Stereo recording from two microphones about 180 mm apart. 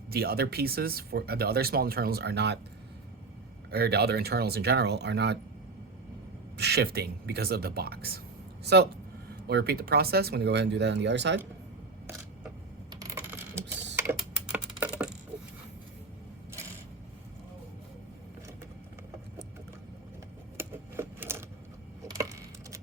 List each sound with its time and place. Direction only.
0.1 s speech: 60° right (ahead or behind)
3.7 s speech: 65° right (ahead or behind)
6.6 s speech: 65° right (ahead or behind)
12.9 s coin: 20° right (ahead or behind)
13.9 s typing: 10° right (ahead or behind)
20.6 s typewriter: 10° right (ahead or behind)
22.0 s typing: 20° right (ahead or behind)